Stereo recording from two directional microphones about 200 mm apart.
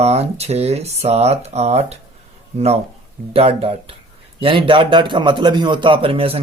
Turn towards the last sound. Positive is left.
turn(degrees=-30)  # may be behind; listen again after turning